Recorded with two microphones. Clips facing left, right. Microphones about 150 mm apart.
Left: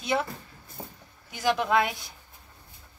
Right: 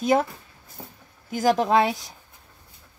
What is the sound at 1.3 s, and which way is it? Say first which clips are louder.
Speech: right 5 dB; 40° right (ahead or behind).